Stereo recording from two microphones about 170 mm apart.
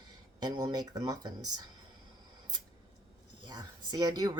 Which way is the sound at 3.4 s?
25° right (ahead or behind).